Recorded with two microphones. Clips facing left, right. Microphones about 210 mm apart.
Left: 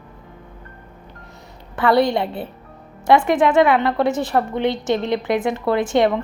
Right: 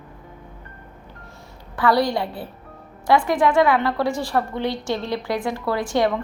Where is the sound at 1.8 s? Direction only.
25° left (ahead or behind).